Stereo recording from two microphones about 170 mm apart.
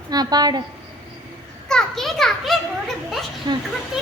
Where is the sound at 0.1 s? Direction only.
25° right (ahead or behind).